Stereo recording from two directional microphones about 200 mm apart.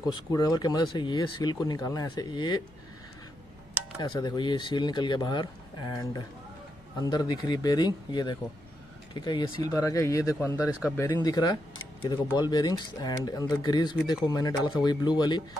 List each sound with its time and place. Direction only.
0.1 s speech: 20° left (ahead or behind)
4.0 s speech: 20° left (ahead or behind)